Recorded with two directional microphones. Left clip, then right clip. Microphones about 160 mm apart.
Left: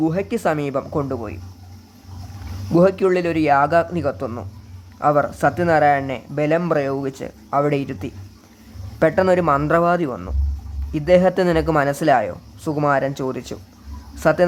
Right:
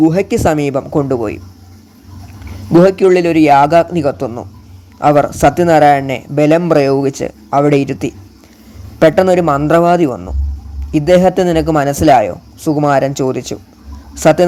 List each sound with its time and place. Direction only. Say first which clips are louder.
0.0 s speech: right 9 dB; 15° right (ahead or behind)
1.0 s speech: right 11 dB; 25° right (ahead or behind)
2.7 s speech: right 8 dB; 10° right (ahead or behind)